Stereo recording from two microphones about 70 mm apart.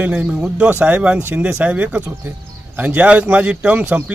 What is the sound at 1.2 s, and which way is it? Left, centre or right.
Speech, right.